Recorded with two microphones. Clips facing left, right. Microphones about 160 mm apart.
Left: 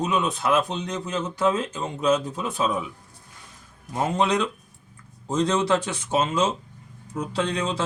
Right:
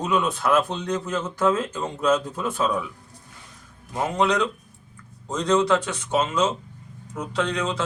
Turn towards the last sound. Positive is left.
turn(degrees=30)  # may be behind; listen again after turning